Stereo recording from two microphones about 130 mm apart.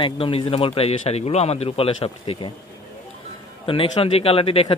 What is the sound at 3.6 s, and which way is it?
Speech, 45° left (ahead or behind).